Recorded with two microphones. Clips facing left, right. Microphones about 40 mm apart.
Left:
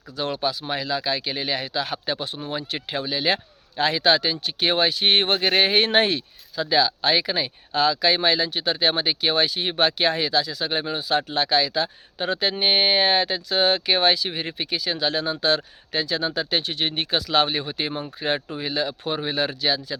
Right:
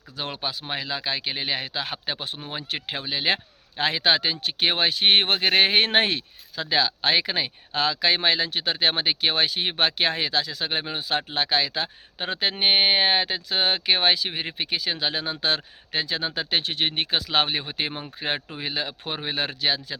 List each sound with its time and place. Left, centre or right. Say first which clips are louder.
0.2 s speech: left 5 dB; right
18.3 s speech: left 4 dB; centre
18.6 s speech: left 4 dB; right